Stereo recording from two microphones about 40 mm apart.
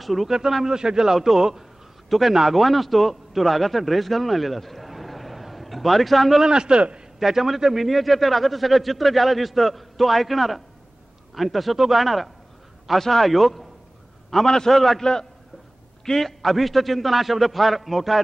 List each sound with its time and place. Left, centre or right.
0.0 s speech: centre
2.0 s a man's voice: centre
6.4 s a man's voice: right
7.2 s a man's voice: centre
14.3 s a man's voice: centre